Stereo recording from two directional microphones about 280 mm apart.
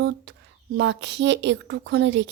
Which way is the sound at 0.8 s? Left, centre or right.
Right.